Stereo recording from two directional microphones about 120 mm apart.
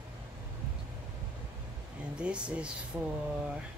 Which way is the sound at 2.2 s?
10° right (ahead or behind).